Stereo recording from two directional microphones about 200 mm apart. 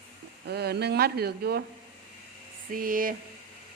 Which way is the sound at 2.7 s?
45° right (ahead or behind).